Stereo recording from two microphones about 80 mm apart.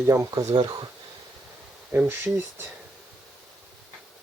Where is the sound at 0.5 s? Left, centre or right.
Right.